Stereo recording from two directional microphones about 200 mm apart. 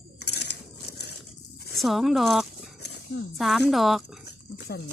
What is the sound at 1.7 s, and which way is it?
Speech, centre (ahead or behind).